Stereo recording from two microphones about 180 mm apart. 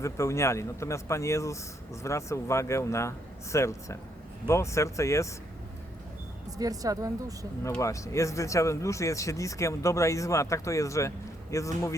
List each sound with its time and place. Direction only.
0.0 s speech: 15° left (ahead or behind)
6.6 s a woman's voice: 20° right (ahead or behind)
7.8 s speech: 15° left (ahead or behind)